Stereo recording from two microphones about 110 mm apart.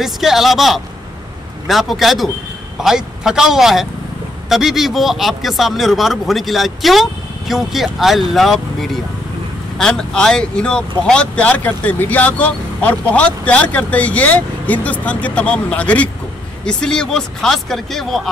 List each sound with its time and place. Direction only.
0.0 s a man's voice: centre (ahead or behind)